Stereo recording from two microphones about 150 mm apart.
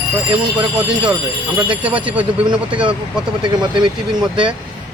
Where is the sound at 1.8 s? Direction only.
10° right (ahead or behind).